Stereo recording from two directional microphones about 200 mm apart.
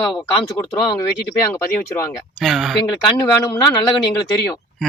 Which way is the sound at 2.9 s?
15° left (ahead or behind).